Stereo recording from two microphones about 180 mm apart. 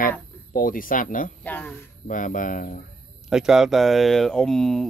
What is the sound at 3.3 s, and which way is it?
Speech, 5° right (ahead or behind).